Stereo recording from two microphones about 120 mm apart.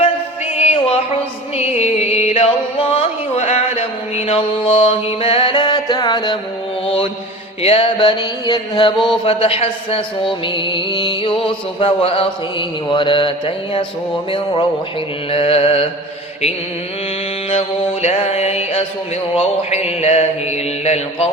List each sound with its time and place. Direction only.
0.6 s music: 55° left (ahead or behind); by 6.4 s 35° left (ahead or behind)
6.8 s mantra: 50° left (ahead or behind)
7.6 s a sound: 50° left (ahead or behind); by 8.9 s 35° left (ahead or behind)
9.2 s speech: 50° left (ahead or behind)
18.0 s mantra: 60° left (ahead or behind)